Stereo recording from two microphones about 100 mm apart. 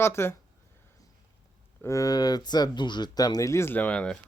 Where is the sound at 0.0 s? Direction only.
25° left (ahead or behind).